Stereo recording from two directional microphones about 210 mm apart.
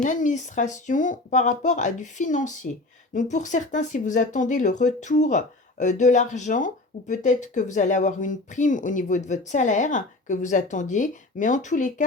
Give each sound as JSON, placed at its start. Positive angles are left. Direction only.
{"t": 0.0, "sound": "speech", "side_deg": 35}